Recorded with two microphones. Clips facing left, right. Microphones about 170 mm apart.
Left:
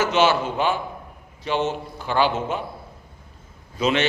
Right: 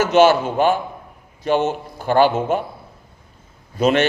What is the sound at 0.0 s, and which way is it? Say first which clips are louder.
A man's voice: right 6 dB; 50° right (ahead or behind).